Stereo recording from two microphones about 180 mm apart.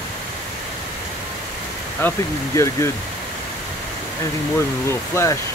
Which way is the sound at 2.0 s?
10° left (ahead or behind).